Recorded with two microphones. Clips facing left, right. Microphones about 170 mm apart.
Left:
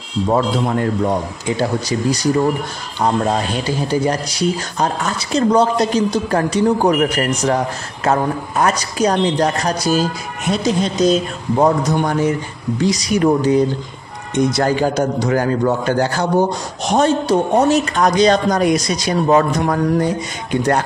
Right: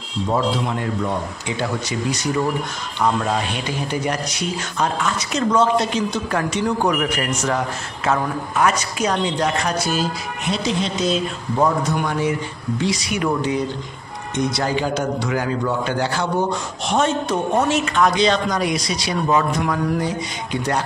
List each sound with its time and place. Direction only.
0.3 s a man's voice: 45° left (ahead or behind)
1.6 s a man's voice: 35° left (ahead or behind)